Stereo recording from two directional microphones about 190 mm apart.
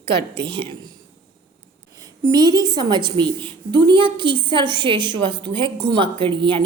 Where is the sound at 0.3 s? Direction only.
25° right (ahead or behind).